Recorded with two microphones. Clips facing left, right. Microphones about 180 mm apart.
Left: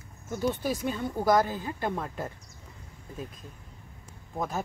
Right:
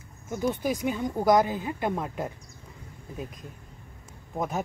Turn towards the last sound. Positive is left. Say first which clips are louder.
# right 2 dB
turn(degrees=-15)  # may be behind; listen again after turning